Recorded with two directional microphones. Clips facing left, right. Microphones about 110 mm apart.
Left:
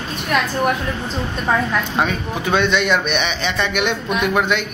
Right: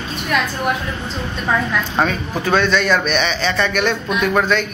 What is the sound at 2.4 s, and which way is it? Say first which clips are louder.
A man's voice: right 1 dB; 20° left (ahead or behind).